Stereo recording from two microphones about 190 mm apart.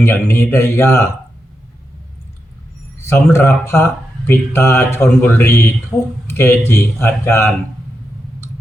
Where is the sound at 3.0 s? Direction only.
15° left (ahead or behind).